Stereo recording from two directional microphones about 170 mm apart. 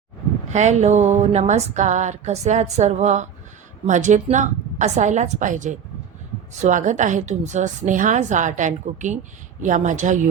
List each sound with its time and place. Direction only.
0.5 s speech: 45° right (ahead or behind)